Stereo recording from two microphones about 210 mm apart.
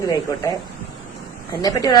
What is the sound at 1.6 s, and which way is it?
Speech, 15° left (ahead or behind).